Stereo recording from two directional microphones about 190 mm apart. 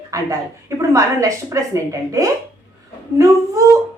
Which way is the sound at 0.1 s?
15° right (ahead or behind).